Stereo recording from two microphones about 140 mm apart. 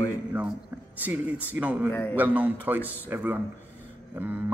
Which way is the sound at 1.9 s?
15° left (ahead or behind).